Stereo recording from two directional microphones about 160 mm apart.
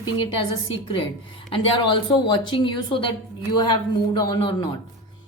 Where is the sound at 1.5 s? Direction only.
30° left (ahead or behind).